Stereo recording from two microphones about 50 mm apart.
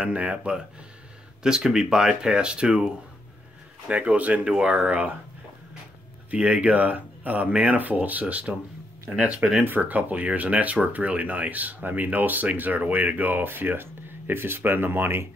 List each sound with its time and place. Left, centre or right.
0.0 s a man's voice: right
6.3 s a man's voice: right